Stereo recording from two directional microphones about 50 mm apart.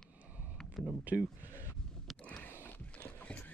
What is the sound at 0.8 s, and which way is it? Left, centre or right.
Speech, centre.